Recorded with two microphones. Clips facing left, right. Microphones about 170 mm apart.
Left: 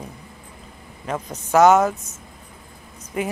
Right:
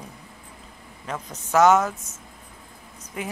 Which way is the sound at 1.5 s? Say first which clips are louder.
Left 3 dB; 15° left (ahead or behind).